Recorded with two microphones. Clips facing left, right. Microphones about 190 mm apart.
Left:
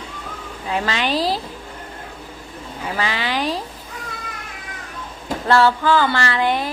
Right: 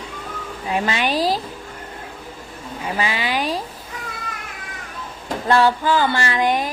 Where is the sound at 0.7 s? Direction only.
15° right (ahead or behind).